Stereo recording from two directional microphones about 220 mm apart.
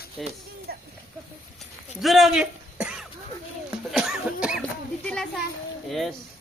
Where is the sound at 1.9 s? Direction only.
Centre (ahead or behind).